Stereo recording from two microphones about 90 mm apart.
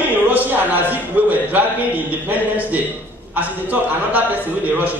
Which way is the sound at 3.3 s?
20° right (ahead or behind).